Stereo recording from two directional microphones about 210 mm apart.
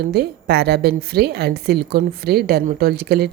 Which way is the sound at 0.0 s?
50° right (ahead or behind).